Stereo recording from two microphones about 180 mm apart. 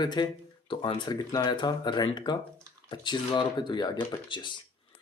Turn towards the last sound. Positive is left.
turn(degrees=25)  # may be behind; listen again after turning